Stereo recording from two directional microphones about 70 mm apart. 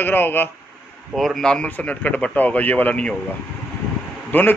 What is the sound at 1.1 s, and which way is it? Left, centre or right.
A man's voice, centre.